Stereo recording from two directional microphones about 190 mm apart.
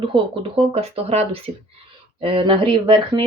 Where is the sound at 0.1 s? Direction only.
30° right (ahead or behind).